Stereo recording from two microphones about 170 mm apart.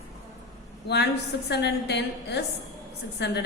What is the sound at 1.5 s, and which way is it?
A woman's voice, 80° left.